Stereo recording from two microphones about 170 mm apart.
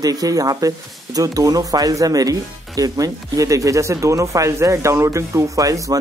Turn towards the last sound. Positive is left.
turn(degrees=-20)  # may be behind; listen again after turning